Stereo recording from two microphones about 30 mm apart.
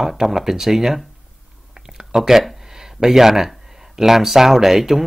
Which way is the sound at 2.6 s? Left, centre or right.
Centre.